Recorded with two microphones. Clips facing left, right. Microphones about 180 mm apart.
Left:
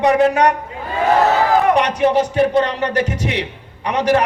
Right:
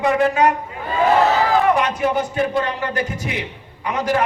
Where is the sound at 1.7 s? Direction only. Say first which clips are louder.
Left 4 dB; 75° left (ahead or behind).